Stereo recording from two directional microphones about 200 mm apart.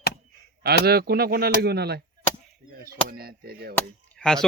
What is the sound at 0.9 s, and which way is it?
Speech, 50° right (ahead or behind).